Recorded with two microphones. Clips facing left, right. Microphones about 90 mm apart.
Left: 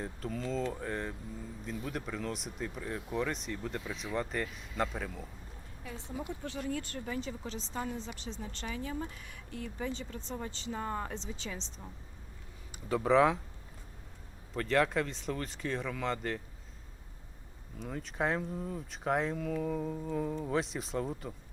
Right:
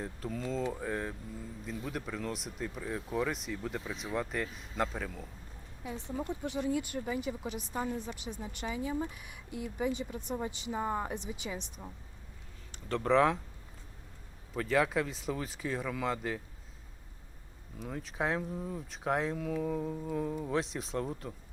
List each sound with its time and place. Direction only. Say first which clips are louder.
0.0 s speech: even; centre (ahead or behind)
5.8 s speech: right 3 dB; 20° right (ahead or behind)
12.9 s speech: left 1 dB; 5° left (ahead or behind)
14.5 s speech: even; 5° right (ahead or behind)
17.7 s speech: left 1 dB; centre (ahead or behind)